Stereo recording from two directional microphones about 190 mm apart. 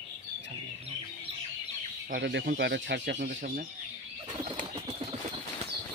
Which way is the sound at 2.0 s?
60° right (ahead or behind).